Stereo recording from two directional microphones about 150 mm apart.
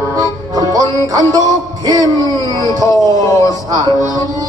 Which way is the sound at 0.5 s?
25° right (ahead or behind).